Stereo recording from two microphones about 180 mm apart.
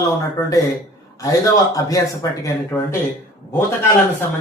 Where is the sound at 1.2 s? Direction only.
20° left (ahead or behind).